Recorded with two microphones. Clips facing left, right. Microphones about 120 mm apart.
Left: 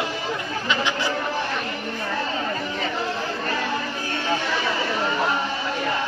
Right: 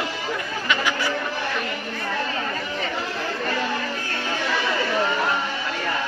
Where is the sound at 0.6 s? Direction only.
25° left (ahead or behind).